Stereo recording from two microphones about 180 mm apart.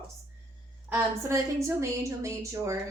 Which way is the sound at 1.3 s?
15° right (ahead or behind).